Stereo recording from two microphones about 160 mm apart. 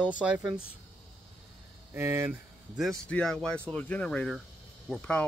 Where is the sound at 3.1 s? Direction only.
5° left (ahead or behind).